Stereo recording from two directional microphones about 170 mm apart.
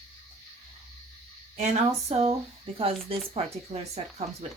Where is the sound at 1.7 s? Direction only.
40° right (ahead or behind).